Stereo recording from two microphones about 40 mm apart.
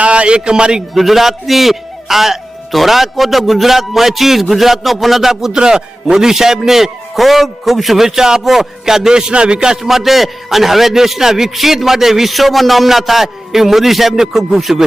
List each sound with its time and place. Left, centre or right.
0.0 s a man's voice: right
0.9 s a man's voice: centre
5.5 s a man's voice: centre